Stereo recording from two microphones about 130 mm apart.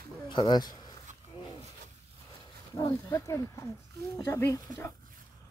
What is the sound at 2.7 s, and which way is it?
Speech, 25° left (ahead or behind).